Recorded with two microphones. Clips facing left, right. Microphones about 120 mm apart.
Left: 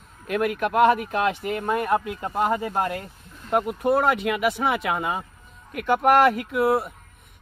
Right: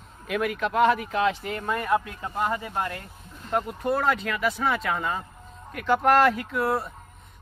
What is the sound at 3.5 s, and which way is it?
Speech, 5° left (ahead or behind).